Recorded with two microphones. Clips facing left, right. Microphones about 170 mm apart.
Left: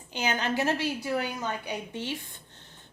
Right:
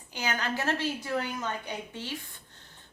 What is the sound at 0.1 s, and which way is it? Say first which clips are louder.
A woman's voice: left 3 dB; 20° left (ahead or behind).